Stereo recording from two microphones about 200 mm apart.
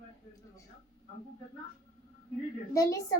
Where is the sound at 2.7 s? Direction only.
15° left (ahead or behind).